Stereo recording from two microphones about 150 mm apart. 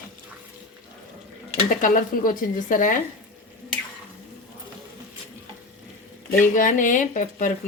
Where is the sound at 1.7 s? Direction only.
65° left (ahead or behind).